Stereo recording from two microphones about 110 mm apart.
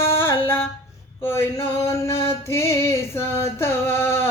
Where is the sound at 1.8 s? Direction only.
20° left (ahead or behind).